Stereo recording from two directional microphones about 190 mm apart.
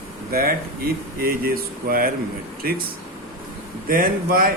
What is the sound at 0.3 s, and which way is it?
Speech, 50° right (ahead or behind).